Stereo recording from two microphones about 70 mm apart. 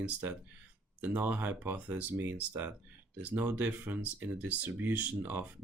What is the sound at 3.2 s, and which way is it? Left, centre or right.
Speech, right.